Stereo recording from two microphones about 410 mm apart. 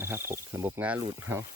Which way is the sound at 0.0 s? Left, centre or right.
Centre.